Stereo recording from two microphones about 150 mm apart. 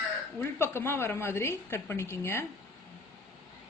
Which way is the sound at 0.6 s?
15° left (ahead or behind).